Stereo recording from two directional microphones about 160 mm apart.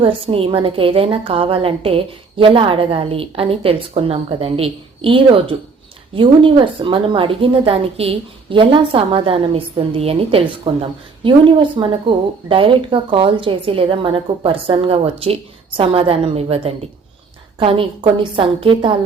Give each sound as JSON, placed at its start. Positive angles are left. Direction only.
{"t": 0.0, "sound": "a woman's voice", "side_deg": -35}